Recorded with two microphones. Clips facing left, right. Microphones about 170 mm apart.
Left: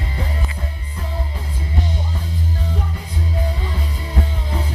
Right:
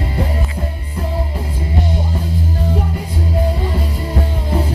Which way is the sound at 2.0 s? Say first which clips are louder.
Right 6 dB; 35° right (ahead or behind).